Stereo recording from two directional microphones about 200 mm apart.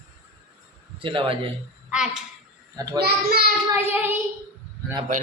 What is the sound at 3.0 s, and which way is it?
Speech, 50° right (ahead or behind).